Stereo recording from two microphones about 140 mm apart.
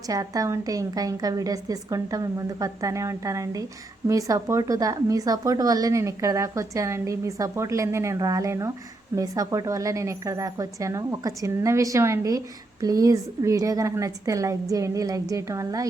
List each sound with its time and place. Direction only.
0.1 s a woman's voice: 25° right (ahead or behind)